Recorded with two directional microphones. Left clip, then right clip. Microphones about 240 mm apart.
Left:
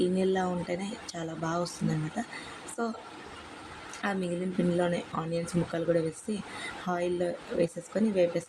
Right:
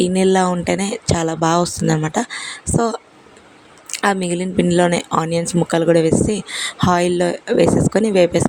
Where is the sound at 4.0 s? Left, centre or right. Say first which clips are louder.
Right 14 dB; right.